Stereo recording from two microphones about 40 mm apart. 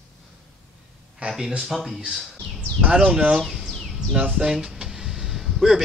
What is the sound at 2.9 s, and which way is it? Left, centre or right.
Speech, right.